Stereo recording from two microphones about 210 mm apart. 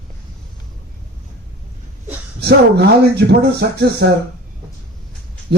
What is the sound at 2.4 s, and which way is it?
Speech, 50° right (ahead or behind).